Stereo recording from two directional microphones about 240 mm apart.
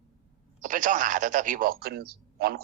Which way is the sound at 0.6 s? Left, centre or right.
Right.